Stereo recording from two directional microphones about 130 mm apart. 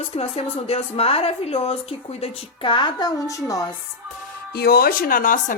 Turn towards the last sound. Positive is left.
turn(degrees=90)